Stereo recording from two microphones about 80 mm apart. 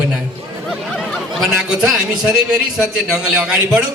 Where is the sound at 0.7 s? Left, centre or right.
Centre.